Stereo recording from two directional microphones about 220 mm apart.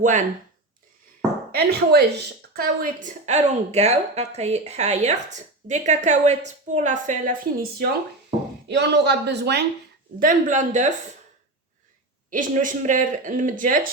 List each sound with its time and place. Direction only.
0.0 s a woman's voice: 35° right (ahead or behind)
1.5 s a woman's voice: 45° right (ahead or behind)
10.2 s a woman's voice: 35° right (ahead or behind)
12.3 s a woman's voice: 35° right (ahead or behind)